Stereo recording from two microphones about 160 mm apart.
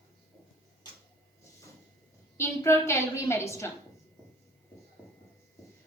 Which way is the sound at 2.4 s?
15° left (ahead or behind).